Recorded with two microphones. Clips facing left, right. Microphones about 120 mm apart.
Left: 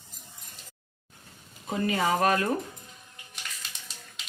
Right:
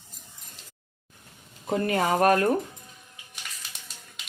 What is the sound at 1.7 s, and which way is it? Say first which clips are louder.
Speech: right 2 dB; 55° right (ahead or behind).